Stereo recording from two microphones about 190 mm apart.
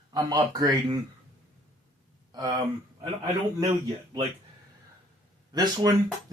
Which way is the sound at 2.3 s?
20° right (ahead or behind).